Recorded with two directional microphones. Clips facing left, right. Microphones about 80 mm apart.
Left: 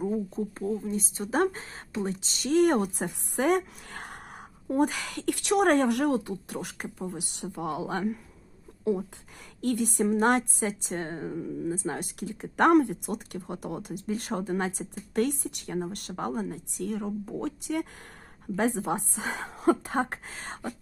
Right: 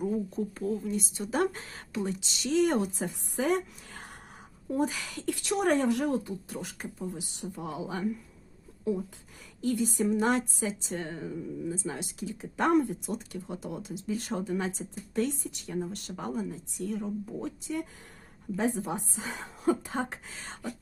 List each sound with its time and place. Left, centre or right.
0.3 s a woman's voice: left
11.3 s a woman's voice: left